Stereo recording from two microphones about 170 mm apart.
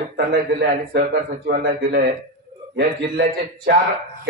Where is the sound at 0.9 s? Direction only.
65° right (ahead or behind).